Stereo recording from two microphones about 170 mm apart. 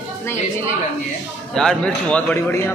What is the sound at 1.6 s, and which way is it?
Speech, 5° left (ahead or behind).